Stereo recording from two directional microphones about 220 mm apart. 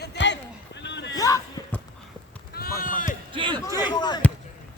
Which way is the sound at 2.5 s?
45° left (ahead or behind).